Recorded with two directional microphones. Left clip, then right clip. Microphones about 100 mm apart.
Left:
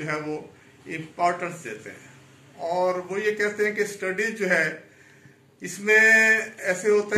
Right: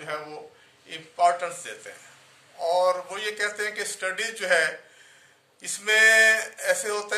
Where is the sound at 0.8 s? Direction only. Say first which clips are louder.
Right 2 dB; 35° right (ahead or behind).